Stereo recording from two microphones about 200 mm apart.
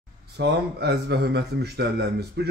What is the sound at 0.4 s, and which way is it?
A man's voice, 55° right (ahead or behind).